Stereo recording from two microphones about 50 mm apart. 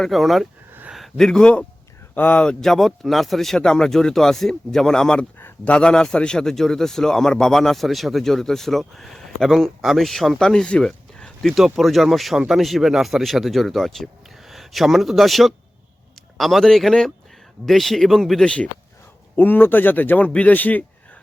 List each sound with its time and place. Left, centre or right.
0.0 s speech: centre
1.1 s a man's voice: centre
2.1 s speech: left
2.6 s a man's voice: centre
10.4 s speech: centre
11.5 s speech: centre
18.4 s speech: centre
19.4 s speech: left